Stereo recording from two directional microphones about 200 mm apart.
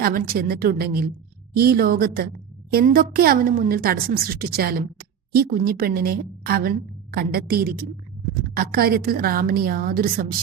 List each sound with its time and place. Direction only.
0.0 s a woman's voice: 45° right (ahead or behind)